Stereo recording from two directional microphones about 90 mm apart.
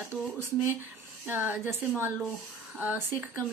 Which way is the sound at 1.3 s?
20° right (ahead or behind).